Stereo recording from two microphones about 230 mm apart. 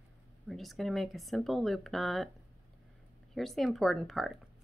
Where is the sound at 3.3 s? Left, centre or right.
Centre.